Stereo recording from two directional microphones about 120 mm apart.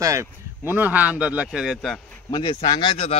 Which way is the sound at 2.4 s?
45° left (ahead or behind).